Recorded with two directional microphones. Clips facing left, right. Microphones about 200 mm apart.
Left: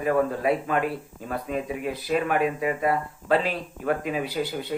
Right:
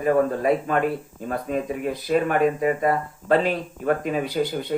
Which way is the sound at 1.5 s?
45° right (ahead or behind).